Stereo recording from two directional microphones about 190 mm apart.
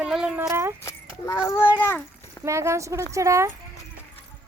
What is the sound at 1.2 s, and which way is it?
Speech, 20° left (ahead or behind).